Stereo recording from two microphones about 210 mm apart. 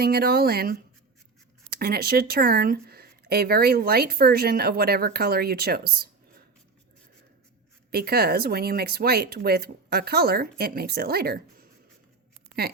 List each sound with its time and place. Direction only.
0.0 s speech: 45° right (ahead or behind)
7.9 s speech: 45° right (ahead or behind)
12.6 s speech: 50° right (ahead or behind)